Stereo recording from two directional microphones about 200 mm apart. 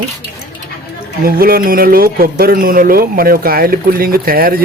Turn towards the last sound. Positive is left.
turn(degrees=-45)  # may be behind; listen again after turning